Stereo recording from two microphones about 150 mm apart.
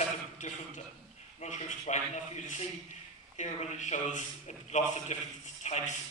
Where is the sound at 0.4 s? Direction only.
55° left (ahead or behind).